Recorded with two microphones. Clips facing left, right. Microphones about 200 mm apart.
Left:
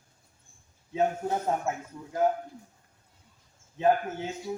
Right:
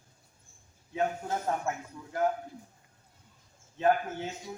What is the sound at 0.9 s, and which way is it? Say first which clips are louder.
Speech: left 4 dB; 20° left (ahead or behind).